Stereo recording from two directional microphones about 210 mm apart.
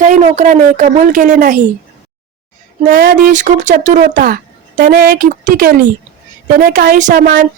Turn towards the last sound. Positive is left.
turn(degrees=-40)  # may be behind; listen again after turning